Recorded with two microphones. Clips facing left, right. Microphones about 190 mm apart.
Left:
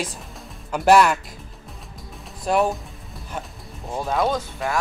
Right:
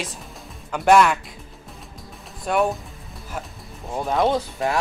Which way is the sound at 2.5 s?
Centre (ahead or behind).